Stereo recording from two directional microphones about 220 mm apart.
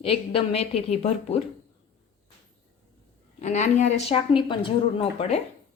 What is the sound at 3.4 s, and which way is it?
Speech, 35° left (ahead or behind).